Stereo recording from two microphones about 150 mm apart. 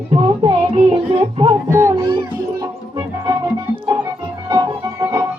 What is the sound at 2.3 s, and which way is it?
Music, 25° right (ahead or behind).